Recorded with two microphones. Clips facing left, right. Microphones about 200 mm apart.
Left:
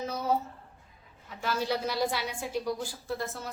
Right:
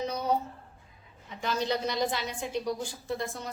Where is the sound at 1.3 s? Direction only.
5° left (ahead or behind).